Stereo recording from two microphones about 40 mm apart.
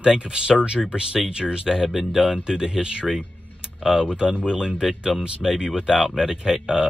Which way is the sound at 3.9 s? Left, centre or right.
Centre.